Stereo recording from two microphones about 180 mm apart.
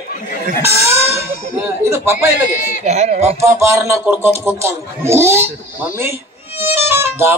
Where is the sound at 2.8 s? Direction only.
35° right (ahead or behind).